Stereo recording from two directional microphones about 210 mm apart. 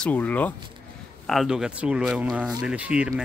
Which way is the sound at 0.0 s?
5° left (ahead or behind).